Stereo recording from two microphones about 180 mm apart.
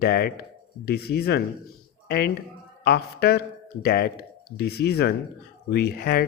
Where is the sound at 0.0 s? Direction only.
60° left (ahead or behind).